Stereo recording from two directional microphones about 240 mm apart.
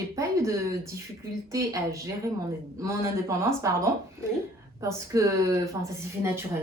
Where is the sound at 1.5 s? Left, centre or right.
Centre.